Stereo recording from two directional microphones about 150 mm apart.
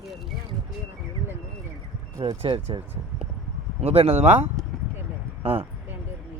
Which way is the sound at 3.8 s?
45° right (ahead or behind).